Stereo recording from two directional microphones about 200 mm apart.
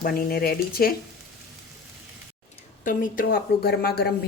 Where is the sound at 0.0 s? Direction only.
50° left (ahead or behind).